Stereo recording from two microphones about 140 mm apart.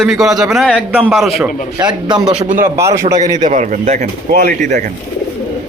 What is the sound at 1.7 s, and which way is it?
Speech, 30° right (ahead or behind).